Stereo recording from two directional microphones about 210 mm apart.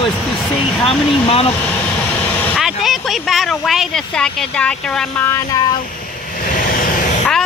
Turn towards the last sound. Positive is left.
turn(degrees=35)  # may be behind; listen again after turning